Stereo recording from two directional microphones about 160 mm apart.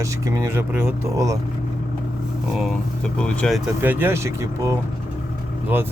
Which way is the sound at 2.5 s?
Centre (ahead or behind).